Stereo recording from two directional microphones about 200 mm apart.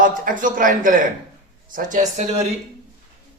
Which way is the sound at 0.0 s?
40° right (ahead or behind).